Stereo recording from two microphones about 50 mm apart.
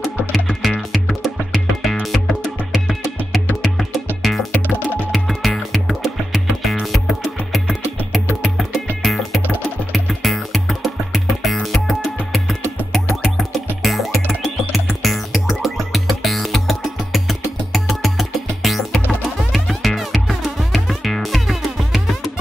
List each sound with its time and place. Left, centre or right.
0.3 s music: centre
4.2 s music: centre
4.6 s music: left
5.1 s music: centre